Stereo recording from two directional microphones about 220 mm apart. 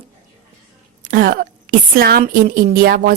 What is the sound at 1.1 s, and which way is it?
A woman's voice, 40° right (ahead or behind).